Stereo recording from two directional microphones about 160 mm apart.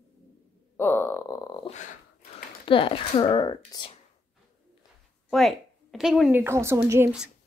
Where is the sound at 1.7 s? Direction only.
50° left (ahead or behind).